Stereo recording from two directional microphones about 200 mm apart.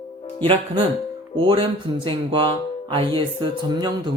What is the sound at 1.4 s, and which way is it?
Speech, 25° right (ahead or behind).